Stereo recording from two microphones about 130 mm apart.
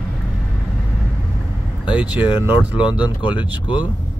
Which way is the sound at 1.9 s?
10° right (ahead or behind).